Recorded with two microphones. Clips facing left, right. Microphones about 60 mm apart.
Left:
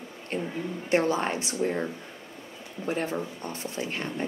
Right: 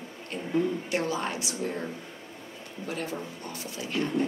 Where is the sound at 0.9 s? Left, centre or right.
Left.